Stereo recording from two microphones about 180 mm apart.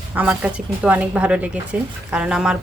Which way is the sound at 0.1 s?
10° right (ahead or behind).